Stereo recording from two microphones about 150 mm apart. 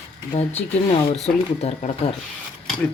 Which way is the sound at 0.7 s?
45° left (ahead or behind).